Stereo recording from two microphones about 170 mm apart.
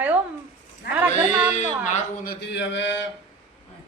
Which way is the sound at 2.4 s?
90° left.